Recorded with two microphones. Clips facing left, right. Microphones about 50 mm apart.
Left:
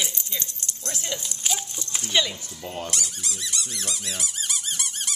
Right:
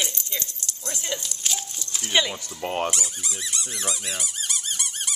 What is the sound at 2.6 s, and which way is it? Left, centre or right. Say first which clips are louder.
Speech: right 8 dB; right.